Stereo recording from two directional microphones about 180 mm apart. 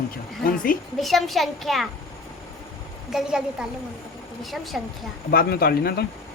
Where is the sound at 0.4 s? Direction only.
50° left (ahead or behind).